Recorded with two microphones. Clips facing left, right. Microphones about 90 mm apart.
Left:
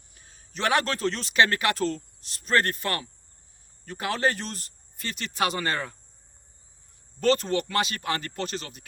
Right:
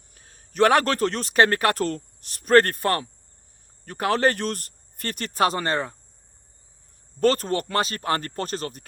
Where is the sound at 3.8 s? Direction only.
55° right (ahead or behind); by 6.0 s 30° right (ahead or behind).